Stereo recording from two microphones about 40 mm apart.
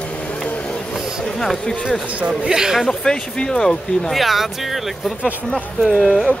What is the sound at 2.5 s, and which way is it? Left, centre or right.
Speech, centre.